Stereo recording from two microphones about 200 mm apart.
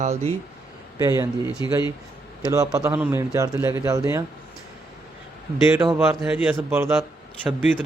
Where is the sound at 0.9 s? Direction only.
15° right (ahead or behind).